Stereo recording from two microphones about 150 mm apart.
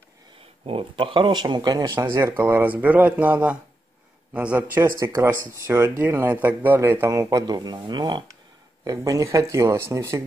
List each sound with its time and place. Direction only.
0.7 s speech: 35° right (ahead or behind); by 10.2 s 20° right (ahead or behind)